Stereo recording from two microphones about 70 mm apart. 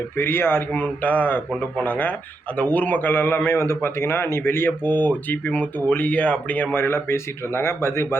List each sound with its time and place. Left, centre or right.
0.2 s a man's voice: left
0.7 s a man's voice: left
6.8 s a man's voice: left